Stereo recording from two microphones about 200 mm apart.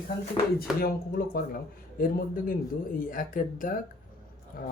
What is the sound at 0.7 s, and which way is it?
Speech, centre (ahead or behind).